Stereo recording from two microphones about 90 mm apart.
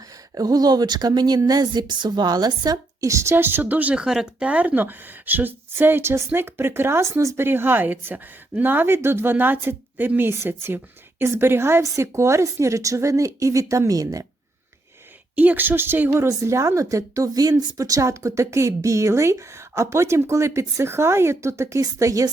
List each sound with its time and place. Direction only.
0.3 s a woman's voice: 45° right (ahead or behind)
15.4 s a woman's voice: 20° right (ahead or behind); by 22.3 s 35° right (ahead or behind)